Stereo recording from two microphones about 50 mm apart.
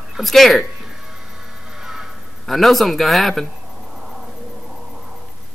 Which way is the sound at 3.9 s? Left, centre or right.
Centre.